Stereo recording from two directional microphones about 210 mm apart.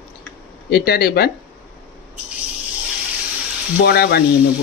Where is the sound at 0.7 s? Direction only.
50° left (ahead or behind).